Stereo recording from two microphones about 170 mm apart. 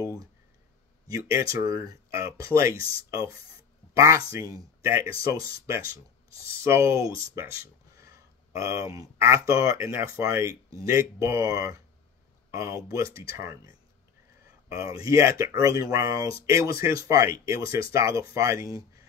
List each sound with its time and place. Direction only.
1.0 s speech: 20° right (ahead or behind)